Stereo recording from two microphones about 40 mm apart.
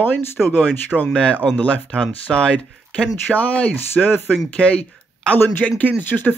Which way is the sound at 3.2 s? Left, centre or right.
Left.